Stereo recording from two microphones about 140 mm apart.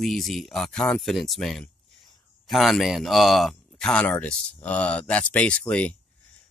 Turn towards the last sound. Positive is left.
turn(degrees=10)  # may be behind; listen again after turning